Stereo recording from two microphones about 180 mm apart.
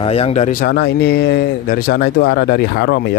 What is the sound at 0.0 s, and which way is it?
Speech, 35° left (ahead or behind).